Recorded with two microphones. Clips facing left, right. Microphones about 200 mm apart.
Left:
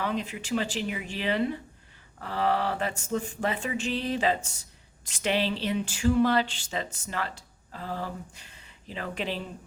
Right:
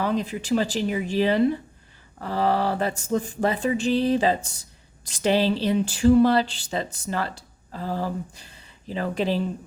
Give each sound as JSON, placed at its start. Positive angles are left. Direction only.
{"t": 0.0, "sound": "speech", "side_deg": -35}